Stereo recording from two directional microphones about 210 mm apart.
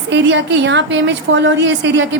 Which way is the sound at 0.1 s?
55° right (ahead or behind).